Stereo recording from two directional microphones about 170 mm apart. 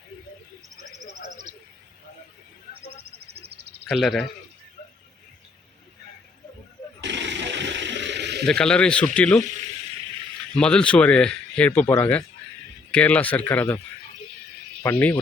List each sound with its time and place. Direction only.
3.0 s a sound: 70° right (ahead or behind)
3.8 s speech: centre (ahead or behind)
7.0 s a sound: 90° right
8.4 s speech: 5° left (ahead or behind)
10.5 s speech: 5° left (ahead or behind)
14.8 s speech: 10° left (ahead or behind)